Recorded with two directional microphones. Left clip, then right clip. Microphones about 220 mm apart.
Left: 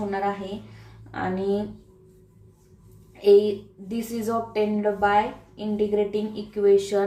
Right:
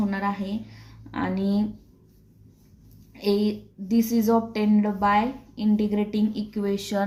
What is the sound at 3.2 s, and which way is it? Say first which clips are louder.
A woman's voice: left 8 dB; 45° right (ahead or behind).